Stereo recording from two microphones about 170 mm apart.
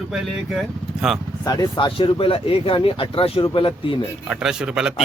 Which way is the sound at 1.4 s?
25° left (ahead or behind).